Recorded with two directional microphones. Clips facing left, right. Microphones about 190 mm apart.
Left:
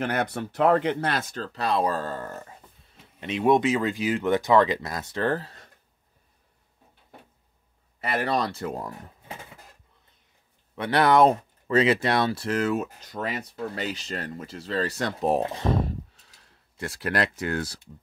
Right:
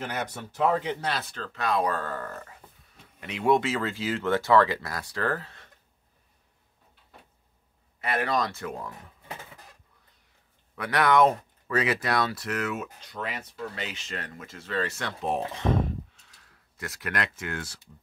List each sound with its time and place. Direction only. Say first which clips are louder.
0.0 s speech: left 6 dB; 60° left (ahead or behind); by 5.4 s 20° left (ahead or behind)
5.4 s a sound: left 3 dB; 35° left (ahead or behind)
8.0 s speech: left 1 dB; 35° left (ahead or behind)
10.8 s speech: left 3 dB; 30° left (ahead or behind)